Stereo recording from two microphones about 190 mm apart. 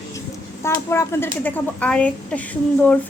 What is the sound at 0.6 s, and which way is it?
A woman's voice, 15° left (ahead or behind).